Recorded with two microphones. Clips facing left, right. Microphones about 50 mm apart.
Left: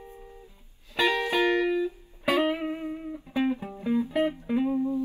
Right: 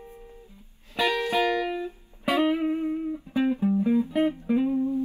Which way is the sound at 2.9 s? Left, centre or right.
Centre.